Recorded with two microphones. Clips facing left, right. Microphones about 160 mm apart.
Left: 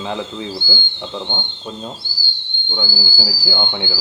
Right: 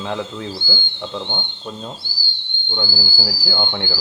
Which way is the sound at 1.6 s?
20° left (ahead or behind).